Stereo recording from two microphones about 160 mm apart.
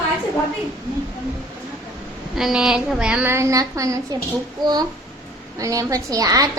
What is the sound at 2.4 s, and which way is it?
A woman's voice, 5° right (ahead or behind).